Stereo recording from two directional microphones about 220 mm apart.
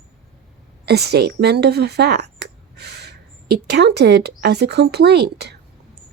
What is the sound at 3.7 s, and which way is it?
Speech, 50° right (ahead or behind).